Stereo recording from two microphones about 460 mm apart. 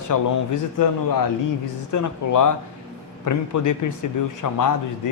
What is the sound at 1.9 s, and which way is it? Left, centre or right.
A man's voice, left.